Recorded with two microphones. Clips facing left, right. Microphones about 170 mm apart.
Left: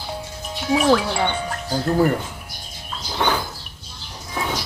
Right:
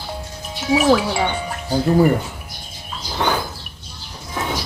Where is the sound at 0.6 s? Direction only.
5° right (ahead or behind).